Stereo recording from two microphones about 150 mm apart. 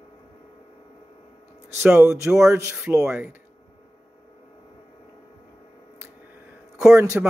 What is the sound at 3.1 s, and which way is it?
Speech, 5° right (ahead or behind).